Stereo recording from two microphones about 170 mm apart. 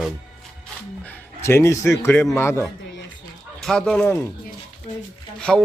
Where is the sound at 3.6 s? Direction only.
Centre (ahead or behind).